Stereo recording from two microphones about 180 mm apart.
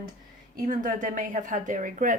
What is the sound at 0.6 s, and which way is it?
Speech, 45° right (ahead or behind).